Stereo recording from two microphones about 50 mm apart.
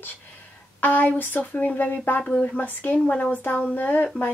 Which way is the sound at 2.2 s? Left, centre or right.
Left.